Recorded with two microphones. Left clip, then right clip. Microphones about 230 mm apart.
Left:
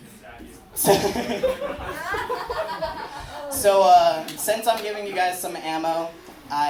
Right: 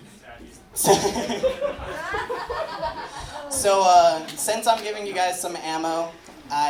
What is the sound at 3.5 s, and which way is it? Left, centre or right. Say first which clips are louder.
Speech: left 2 dB; right.